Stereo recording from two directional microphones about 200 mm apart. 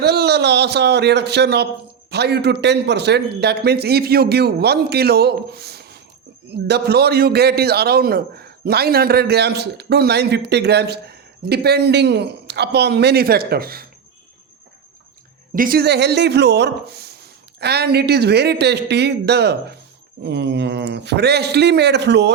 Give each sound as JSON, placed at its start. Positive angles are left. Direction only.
{"t": 0.0, "sound": "a man's voice", "side_deg": -55}
{"t": 15.5, "sound": "speech", "side_deg": -45}